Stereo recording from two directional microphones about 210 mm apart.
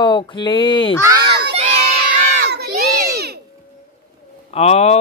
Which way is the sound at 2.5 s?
50° right (ahead or behind).